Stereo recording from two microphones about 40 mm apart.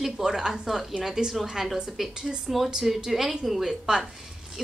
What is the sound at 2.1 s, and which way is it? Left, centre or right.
Speech, centre.